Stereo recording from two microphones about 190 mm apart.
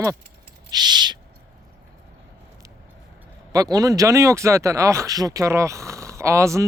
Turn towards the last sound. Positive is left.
turn(degrees=-15)  # may be behind; listen again after turning